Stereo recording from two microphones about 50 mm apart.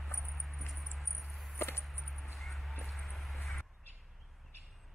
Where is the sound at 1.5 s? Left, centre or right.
Left.